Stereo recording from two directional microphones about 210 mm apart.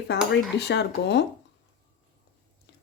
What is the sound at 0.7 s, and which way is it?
Speech, 55° left (ahead or behind).